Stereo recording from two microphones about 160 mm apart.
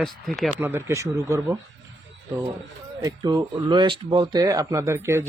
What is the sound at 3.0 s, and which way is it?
Speech, 25° right (ahead or behind).